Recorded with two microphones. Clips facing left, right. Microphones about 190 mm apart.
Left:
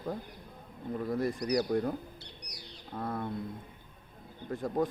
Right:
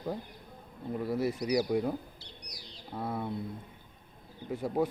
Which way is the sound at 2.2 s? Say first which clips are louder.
Left 1 dB; 65° left (ahead or behind).